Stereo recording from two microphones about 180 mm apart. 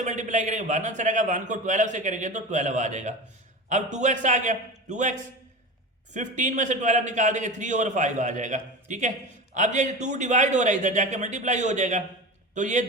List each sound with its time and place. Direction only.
0.0 s a man's voice: 40° right (ahead or behind)
6.1 s a man's voice: 45° right (ahead or behind)